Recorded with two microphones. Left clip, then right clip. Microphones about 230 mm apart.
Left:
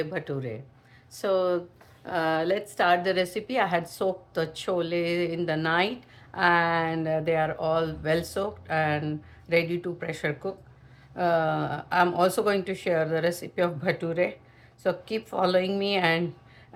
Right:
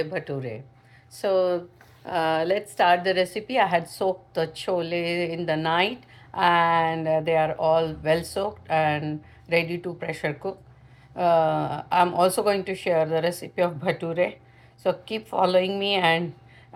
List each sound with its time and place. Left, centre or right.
0.0 s speech: centre